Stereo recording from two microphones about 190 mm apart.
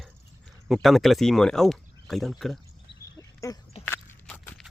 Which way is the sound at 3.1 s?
15° left (ahead or behind).